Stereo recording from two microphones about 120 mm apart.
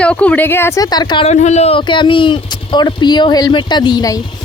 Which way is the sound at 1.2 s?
70° left (ahead or behind).